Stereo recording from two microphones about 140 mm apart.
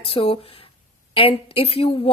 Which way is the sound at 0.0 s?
45° left (ahead or behind).